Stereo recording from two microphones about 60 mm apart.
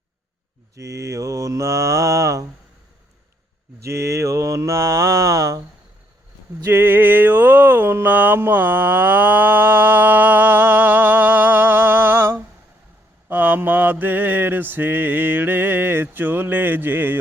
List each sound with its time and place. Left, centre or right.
0.8 s mantra: right
3.8 s mantra: right
6.7 s a sound: right
13.2 s mantra: right